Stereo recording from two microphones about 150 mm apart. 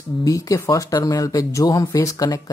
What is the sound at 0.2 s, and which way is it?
Speech, 20° left (ahead or behind).